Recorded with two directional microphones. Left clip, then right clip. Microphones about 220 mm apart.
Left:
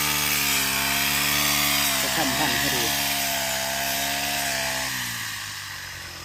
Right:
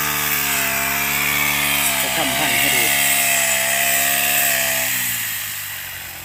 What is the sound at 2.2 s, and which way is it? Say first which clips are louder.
Speech: right 5 dB; 25° right (ahead or behind).